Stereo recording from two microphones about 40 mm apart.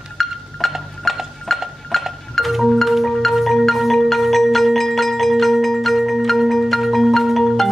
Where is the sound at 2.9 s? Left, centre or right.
Centre.